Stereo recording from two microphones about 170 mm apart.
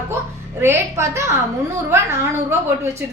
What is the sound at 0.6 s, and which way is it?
A woman's voice, 15° right (ahead or behind).